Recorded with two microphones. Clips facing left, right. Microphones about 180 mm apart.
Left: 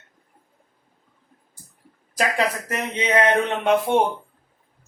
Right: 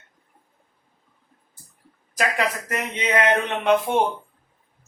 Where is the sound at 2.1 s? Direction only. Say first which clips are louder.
Left 1 dB; 30° left (ahead or behind).